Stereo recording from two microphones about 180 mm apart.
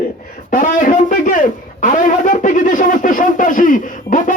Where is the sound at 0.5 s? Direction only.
45° left (ahead or behind).